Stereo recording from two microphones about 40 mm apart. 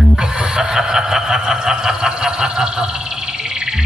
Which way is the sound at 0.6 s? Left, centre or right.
Centre.